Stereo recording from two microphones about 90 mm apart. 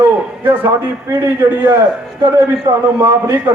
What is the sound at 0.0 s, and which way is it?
A man's voice, 20° right (ahead or behind).